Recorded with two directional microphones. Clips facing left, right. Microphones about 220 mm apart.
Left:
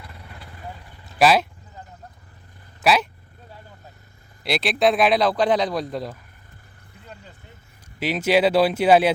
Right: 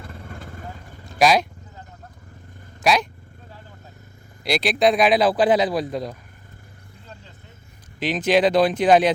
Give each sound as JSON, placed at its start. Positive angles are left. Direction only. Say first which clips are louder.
{"t": 0.0, "sound": "vehicle", "louder": "right 5 dB", "side_deg": -45}
{"t": 1.2, "sound": "speech", "louder": "even", "side_deg": 5}
{"t": 2.8, "sound": "speech", "louder": "even", "side_deg": 5}
{"t": 4.4, "sound": "speech", "louder": "right 1 dB", "side_deg": 0}
{"t": 7.9, "sound": "speech", "louder": "even", "side_deg": 10}